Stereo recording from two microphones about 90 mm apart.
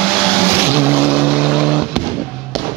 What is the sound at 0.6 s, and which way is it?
Vehicle, 25° right (ahead or behind).